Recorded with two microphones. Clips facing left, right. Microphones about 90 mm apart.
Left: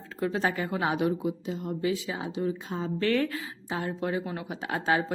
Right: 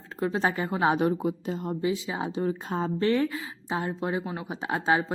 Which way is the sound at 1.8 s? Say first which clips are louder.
Right 1 dB; 25° right (ahead or behind).